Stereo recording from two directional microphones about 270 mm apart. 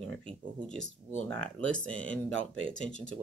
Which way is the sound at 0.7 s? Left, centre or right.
Right.